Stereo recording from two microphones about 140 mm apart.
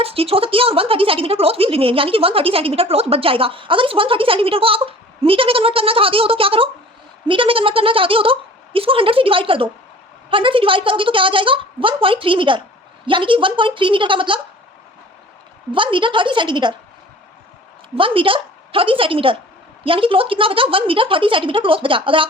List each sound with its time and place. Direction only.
0.0 s a woman's voice: 45° right (ahead or behind)
15.7 s a woman's voice: 35° right (ahead or behind)
17.9 s a woman's voice: 40° right (ahead or behind)